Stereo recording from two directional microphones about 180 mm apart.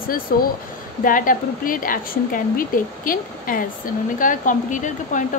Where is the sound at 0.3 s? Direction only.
55° left (ahead or behind).